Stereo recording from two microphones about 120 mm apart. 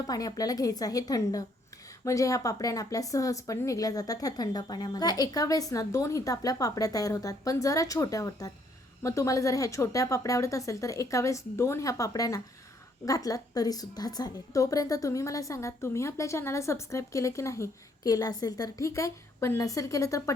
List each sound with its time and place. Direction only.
0.0 s a woman's voice: 30° left (ahead or behind)